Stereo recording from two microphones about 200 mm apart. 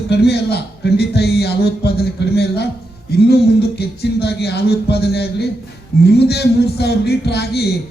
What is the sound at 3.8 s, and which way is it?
A man's voice, 55° left (ahead or behind).